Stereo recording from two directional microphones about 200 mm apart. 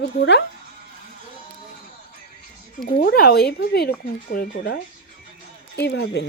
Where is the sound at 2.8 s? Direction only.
50° left (ahead or behind).